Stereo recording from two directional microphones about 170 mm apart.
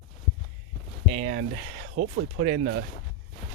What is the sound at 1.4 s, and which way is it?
Speech, 60° right (ahead or behind).